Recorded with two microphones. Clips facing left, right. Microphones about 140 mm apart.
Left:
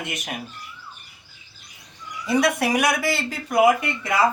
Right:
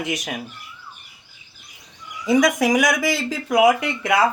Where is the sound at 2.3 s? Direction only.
90° right.